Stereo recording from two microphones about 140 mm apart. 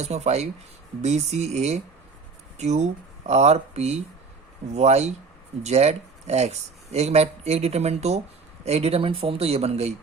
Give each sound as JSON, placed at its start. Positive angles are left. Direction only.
{"t": 0.0, "sound": "speech", "side_deg": -50}